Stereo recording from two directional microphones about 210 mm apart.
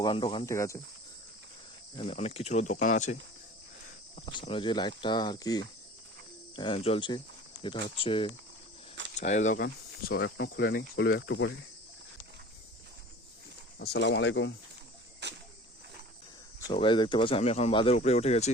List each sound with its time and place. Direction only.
0.0 s speech: 25° left (ahead or behind)
2.0 s speech: 30° left (ahead or behind)
9.6 s speech: 55° left (ahead or behind)
13.7 s speech: 50° left (ahead or behind)
15.2 s cricket: 55° right (ahead or behind)
16.6 s speech: 25° left (ahead or behind)